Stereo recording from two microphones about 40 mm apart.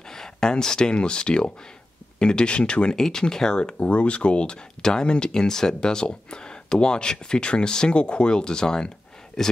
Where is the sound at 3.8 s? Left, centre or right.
Left.